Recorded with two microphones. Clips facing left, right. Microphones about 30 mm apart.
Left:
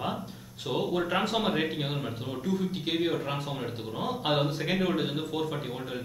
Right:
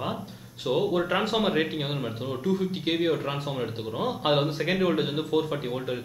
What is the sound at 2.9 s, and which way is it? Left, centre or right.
Speech, centre.